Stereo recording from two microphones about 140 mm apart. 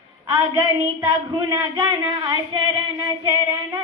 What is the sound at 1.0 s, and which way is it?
Female singing, 30° right (ahead or behind).